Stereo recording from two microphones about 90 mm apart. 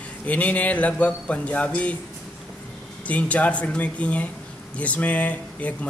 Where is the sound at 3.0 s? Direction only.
15° left (ahead or behind).